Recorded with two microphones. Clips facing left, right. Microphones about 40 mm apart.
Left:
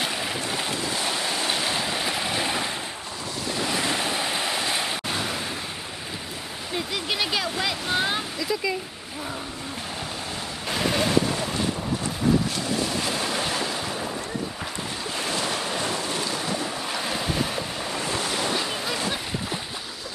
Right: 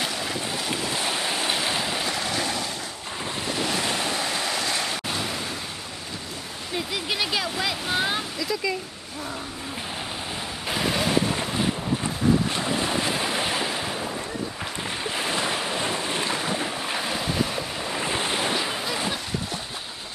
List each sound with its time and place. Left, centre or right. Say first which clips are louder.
0.8 s waves: even; centre
2.0 s boat: left 1 dB; centre
3.7 s waves: left 1 dB; centre
5.1 s a sound: left 1 dB; centre
6.7 s a sound: even; centre
10.7 s waves: left 1 dB; centre
12.5 s waves: right 1 dB; right
13.1 s waves: right 1 dB; centre
13.9 s ocean: even; centre
15.0 s waves: right 1 dB; right
16.3 s boat: right 1 dB; right
17.0 s boat: even; centre
18.0 s waves: right 2 dB; right